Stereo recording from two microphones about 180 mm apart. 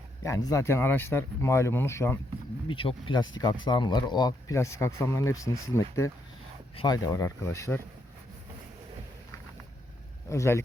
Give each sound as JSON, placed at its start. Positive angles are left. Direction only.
{"t": 0.2, "sound": "speech", "side_deg": 20}
{"t": 2.6, "sound": "speech", "side_deg": 30}
{"t": 10.2, "sound": "speech", "side_deg": 15}